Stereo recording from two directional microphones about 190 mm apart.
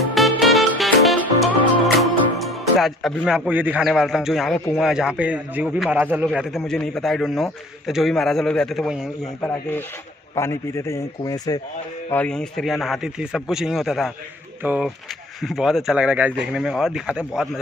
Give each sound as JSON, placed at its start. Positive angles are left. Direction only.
{"t": 0.1, "sound": "music", "side_deg": 0}
{"t": 2.0, "sound": "a man's voice", "side_deg": 0}
{"t": 9.4, "sound": "a man's voice", "side_deg": 10}
{"t": 12.1, "sound": "a man's voice", "side_deg": 5}